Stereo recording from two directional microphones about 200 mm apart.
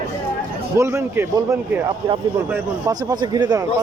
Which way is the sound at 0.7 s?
15° right (ahead or behind).